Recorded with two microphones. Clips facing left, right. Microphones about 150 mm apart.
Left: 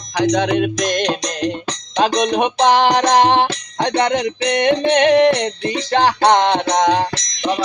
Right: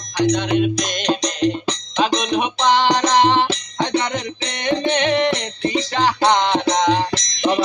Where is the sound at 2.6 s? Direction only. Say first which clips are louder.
Left 3 dB; 60° left (ahead or behind).